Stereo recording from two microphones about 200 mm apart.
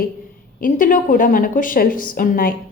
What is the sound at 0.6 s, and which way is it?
A woman's voice, 45° left (ahead or behind).